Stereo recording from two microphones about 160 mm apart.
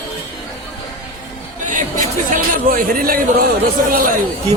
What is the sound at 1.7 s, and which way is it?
Speech, 55° right (ahead or behind).